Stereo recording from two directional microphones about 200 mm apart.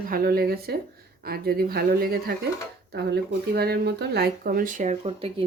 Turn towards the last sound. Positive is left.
turn(degrees=-30)  # may be behind; listen again after turning